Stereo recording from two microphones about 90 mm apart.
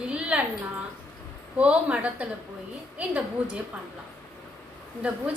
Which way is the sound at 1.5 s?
15° right (ahead or behind).